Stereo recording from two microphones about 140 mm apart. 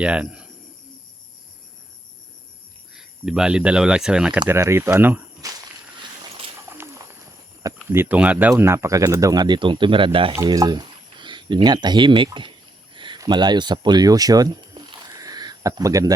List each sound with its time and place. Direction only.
0.0 s speech: 10° right (ahead or behind)
2.9 s speech: 5° right (ahead or behind)
5.4 s walk: 25° right (ahead or behind)
6.0 s a sound: 40° right (ahead or behind)
6.6 s bird: 20° right (ahead or behind)
7.8 s speech: 15° right (ahead or behind); by 10.3 s 40° right (ahead or behind)
10.3 s speech: 25° right (ahead or behind)
12.9 s a sound: 35° right (ahead or behind)